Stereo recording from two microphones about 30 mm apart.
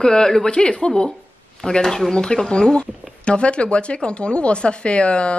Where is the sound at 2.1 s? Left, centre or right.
Left.